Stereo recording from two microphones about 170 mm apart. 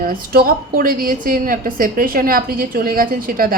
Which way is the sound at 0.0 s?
60° right (ahead or behind).